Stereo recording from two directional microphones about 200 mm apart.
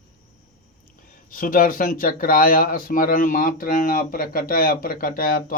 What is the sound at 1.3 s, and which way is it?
Speech, 45° left (ahead or behind).